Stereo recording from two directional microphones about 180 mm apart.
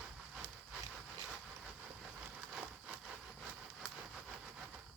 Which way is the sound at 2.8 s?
5° right (ahead or behind).